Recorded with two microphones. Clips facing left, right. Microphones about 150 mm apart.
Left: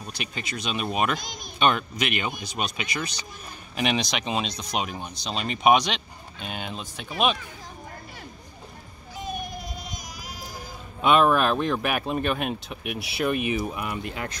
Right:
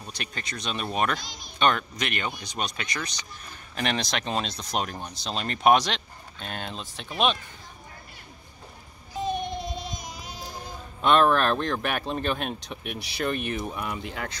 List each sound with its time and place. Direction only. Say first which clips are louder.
0.0 s speech: left 3 dB; 10° left (ahead or behind)
1.2 s speech: left 4 dB; 50° left (ahead or behind)
1.6 s speech: left 1 dB; 10° left (ahead or behind)
9.2 s music: right 5 dB; 25° right (ahead or behind)
11.0 s speech: left 1 dB; 5° left (ahead or behind)